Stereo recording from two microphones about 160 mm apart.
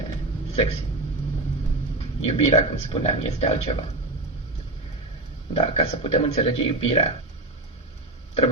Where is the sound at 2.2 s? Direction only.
45° left (ahead or behind).